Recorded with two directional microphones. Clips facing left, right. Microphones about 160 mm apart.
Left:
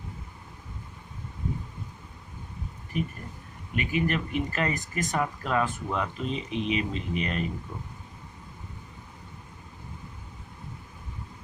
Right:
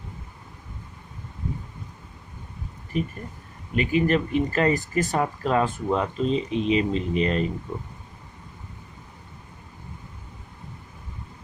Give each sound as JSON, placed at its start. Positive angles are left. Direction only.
{"t": 2.9, "sound": "speech", "side_deg": -30}